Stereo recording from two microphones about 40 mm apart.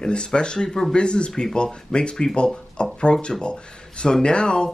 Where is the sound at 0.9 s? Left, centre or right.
Left.